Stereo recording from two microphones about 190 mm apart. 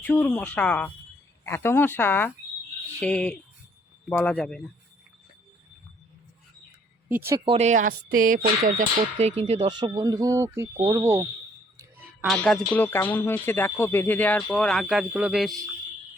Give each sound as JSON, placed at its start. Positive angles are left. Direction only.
{"t": 0.0, "sound": "speech", "side_deg": 10}
{"t": 7.4, "sound": "speech", "side_deg": -35}
{"t": 11.8, "sound": "a sound", "side_deg": -10}
{"t": 12.3, "sound": "speech", "side_deg": 0}